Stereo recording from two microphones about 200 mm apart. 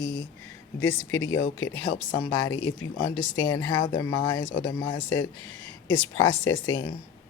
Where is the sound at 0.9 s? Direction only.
80° left.